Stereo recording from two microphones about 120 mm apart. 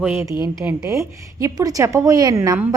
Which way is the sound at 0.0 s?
20° right (ahead or behind).